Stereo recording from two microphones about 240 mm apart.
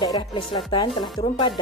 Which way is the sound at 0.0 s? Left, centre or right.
Centre.